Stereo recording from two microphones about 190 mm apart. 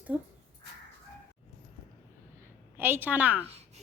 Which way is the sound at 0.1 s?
5° right (ahead or behind).